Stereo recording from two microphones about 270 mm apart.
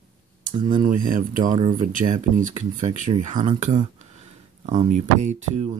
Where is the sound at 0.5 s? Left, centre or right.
Centre.